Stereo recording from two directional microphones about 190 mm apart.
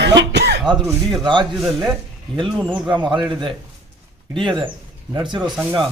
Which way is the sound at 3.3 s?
25° right (ahead or behind).